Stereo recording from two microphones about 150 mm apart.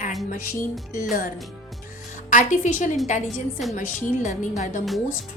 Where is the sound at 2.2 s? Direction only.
55° left (ahead or behind).